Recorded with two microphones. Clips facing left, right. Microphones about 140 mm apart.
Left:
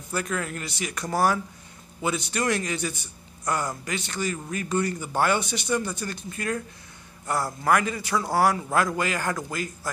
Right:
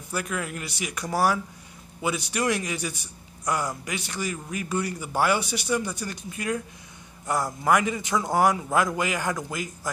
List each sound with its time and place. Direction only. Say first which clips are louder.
0.1 s a man's voice: left 1 dB; 10° right (ahead or behind)